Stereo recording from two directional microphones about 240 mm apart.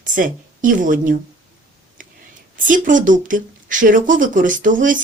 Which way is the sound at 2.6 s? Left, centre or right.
Right.